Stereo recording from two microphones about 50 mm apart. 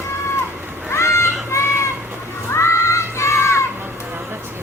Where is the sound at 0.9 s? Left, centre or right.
Left.